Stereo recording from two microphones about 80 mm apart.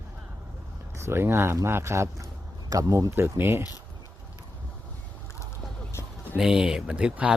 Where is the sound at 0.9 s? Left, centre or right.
Right.